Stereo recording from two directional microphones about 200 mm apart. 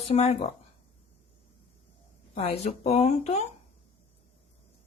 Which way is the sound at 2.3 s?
30° left (ahead or behind).